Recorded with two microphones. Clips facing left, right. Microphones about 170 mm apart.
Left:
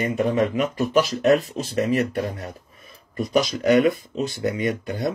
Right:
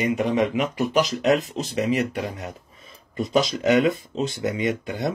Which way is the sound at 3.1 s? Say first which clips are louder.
Even; 25° right (ahead or behind).